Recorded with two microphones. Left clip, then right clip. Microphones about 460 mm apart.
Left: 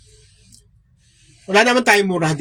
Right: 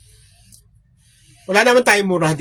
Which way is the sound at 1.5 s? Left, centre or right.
Right.